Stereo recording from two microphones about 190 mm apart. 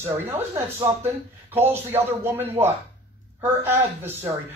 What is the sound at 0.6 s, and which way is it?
Speech, 25° right (ahead or behind).